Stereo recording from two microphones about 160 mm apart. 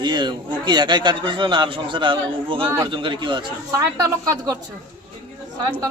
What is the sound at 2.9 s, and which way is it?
A man's voice, 30° right (ahead or behind).